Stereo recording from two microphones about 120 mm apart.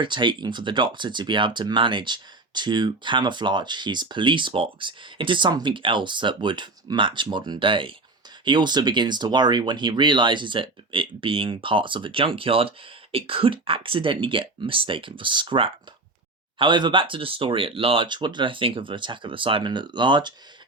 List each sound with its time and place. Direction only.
0.0 s speech: 40° right (ahead or behind)